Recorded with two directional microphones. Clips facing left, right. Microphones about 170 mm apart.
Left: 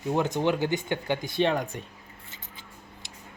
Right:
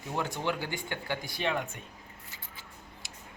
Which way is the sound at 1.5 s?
35° left (ahead or behind).